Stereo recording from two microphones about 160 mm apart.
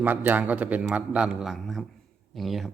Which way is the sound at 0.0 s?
10° right (ahead or behind).